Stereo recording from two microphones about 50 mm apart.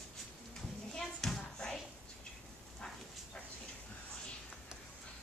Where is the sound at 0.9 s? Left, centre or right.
Centre.